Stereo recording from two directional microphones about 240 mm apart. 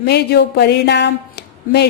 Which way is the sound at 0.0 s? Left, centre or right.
Left.